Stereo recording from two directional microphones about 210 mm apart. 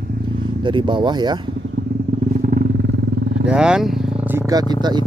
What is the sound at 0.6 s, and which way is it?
Speech, 20° right (ahead or behind).